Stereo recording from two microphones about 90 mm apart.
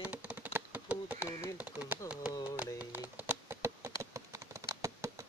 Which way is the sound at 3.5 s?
30° right (ahead or behind).